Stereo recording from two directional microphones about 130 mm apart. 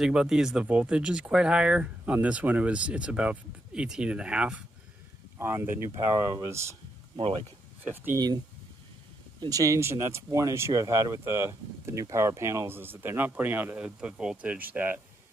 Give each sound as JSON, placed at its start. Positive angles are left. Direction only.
{"t": 0.0, "sound": "speech", "side_deg": -5}
{"t": 7.2, "sound": "speech", "side_deg": -45}
{"t": 7.8, "sound": "speech", "side_deg": -15}
{"t": 9.4, "sound": "speech", "side_deg": -25}